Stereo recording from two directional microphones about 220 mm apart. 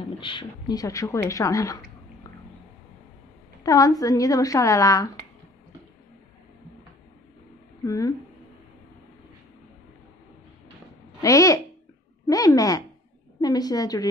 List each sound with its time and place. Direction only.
0.2 s speech: 20° left (ahead or behind)
3.6 s speech: 15° left (ahead or behind)
7.8 s speech: 15° left (ahead or behind)
11.1 s a woman's voice: 15° left (ahead or behind)